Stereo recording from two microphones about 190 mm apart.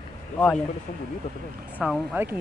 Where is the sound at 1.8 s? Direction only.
10° right (ahead or behind).